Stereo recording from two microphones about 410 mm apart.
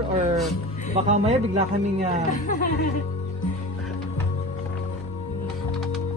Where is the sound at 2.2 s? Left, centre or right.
Centre.